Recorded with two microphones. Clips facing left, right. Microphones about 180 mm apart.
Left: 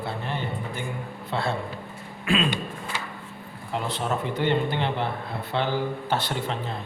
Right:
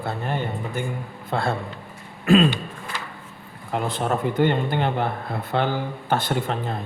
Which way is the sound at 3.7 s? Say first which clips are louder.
Right 4 dB; 50° right (ahead or behind).